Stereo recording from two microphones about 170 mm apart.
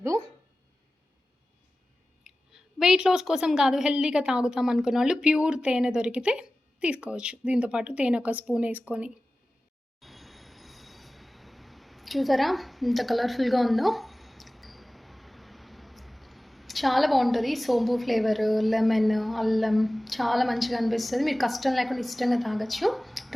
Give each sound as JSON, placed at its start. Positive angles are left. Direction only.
{"t": 0.0, "sound": "a sound", "side_deg": -20}
{"t": 2.2, "sound": "a woman's voice", "side_deg": -5}
{"t": 10.0, "sound": "train", "side_deg": 0}